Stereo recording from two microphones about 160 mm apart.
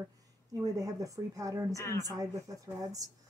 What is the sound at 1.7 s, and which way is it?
Speech, 20° left (ahead or behind).